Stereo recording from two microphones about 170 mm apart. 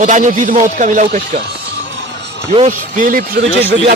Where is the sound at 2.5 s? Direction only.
45° right (ahead or behind).